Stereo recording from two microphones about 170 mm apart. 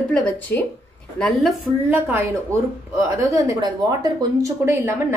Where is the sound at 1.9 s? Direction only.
10° right (ahead or behind).